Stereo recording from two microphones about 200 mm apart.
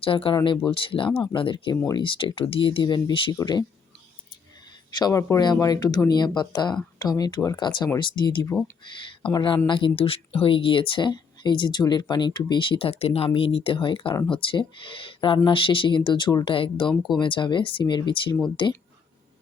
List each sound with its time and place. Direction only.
0.0 s speech: 25° left (ahead or behind)
4.9 s speech: 20° left (ahead or behind)
8.4 s speech: 10° left (ahead or behind)
8.8 s speech: 25° left (ahead or behind)